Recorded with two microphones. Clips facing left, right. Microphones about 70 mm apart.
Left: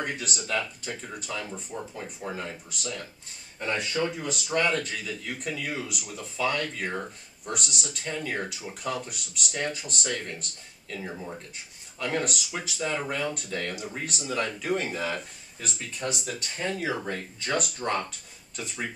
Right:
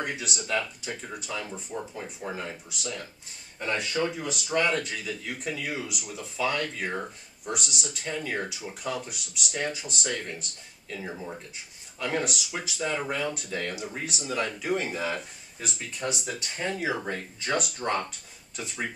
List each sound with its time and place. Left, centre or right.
0.0 s speech: centre